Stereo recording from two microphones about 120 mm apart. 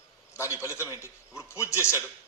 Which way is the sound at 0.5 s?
15° right (ahead or behind).